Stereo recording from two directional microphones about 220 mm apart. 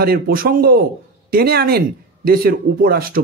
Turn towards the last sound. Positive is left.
turn(degrees=-40)  # may be behind; listen again after turning